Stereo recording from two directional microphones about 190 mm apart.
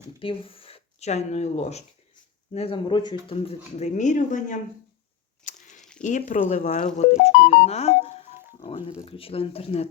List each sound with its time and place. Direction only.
0.2 s speech: 30° left (ahead or behind)
5.5 s a sound: 40° left (ahead or behind)
6.0 s speech: 40° left (ahead or behind)
9.0 s speech: 30° left (ahead or behind)